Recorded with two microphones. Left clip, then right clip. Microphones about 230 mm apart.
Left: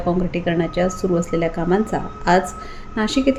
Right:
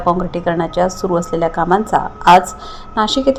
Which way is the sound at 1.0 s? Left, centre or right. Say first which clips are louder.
Right 4 dB; right.